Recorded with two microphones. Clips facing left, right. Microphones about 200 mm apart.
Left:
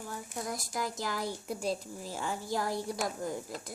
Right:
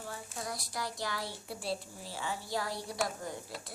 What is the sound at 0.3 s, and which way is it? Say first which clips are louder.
A woman's voice: left 4 dB; 50° left (ahead or behind).